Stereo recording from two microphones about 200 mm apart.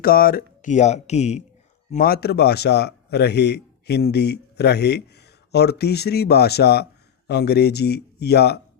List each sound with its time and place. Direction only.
0.0 s speech: 45° left (ahead or behind)
1.9 s a man's voice: 45° left (ahead or behind)